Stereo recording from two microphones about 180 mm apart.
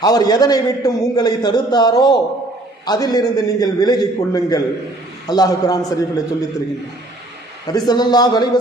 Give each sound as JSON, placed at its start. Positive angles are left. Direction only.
{"t": 0.0, "sound": "a man's voice", "side_deg": 20}
{"t": 7.7, "sound": "a man's voice", "side_deg": 20}